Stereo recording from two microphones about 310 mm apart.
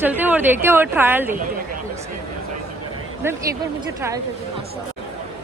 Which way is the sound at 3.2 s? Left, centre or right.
Centre.